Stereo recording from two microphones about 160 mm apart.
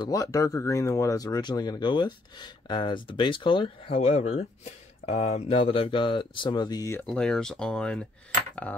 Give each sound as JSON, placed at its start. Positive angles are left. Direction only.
{"t": 0.0, "sound": "speech", "side_deg": 20}
{"t": 7.1, "sound": "speech", "side_deg": 5}